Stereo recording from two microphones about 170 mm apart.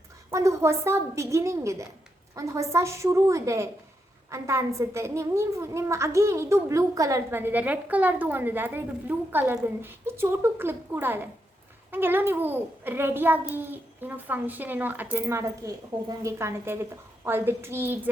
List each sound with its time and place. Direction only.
0.3 s a woman's voice: 15° right (ahead or behind)